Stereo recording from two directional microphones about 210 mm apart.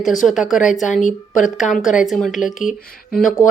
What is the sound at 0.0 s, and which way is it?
Speech, 35° left (ahead or behind).